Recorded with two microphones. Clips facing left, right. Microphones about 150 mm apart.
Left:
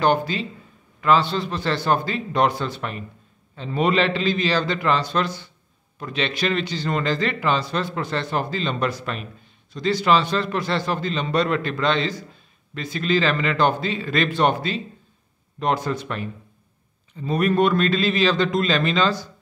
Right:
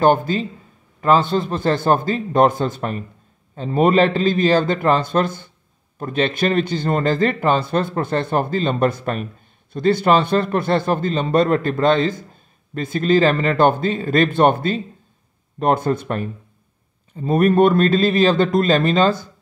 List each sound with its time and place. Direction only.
0.0 s speech: 45° right (ahead or behind)